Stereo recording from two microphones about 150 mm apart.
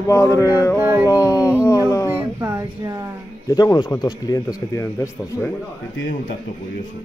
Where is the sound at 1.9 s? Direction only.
20° left (ahead or behind).